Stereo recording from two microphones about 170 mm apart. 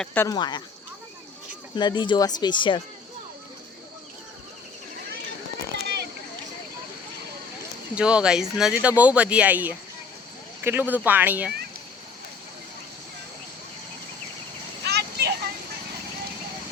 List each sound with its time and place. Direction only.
0.0 s speech: 10° left (ahead or behind)
0.3 s speech: 25° left (ahead or behind)
1.7 s speech: 25° left (ahead or behind)
5.8 s a sound: 75° right (ahead or behind)
7.9 s speech: 5° right (ahead or behind)
14.8 s vehicle: 75° right (ahead or behind)